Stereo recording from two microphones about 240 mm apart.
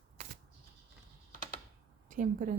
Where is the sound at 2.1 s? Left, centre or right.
Right.